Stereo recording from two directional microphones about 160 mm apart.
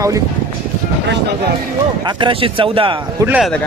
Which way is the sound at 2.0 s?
30° right (ahead or behind).